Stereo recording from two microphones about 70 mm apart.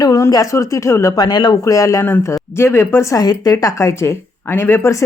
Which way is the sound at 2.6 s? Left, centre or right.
Left.